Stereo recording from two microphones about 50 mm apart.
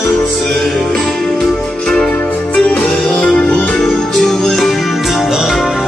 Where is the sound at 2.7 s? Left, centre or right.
Centre.